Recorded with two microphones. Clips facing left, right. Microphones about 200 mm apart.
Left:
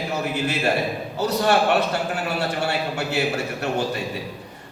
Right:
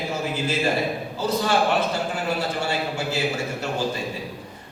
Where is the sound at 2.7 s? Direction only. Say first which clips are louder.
Left 1 dB; 65° left (ahead or behind).